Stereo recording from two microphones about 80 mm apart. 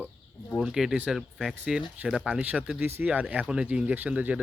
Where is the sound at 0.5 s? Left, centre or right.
Centre.